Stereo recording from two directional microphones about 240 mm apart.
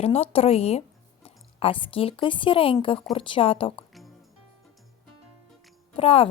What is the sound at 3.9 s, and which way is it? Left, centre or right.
Music, centre.